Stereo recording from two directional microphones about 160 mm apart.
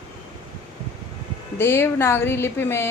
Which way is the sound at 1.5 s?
15° left (ahead or behind).